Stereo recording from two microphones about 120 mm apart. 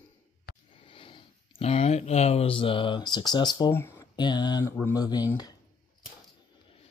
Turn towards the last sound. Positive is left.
turn(degrees=35)  # may be behind; listen again after turning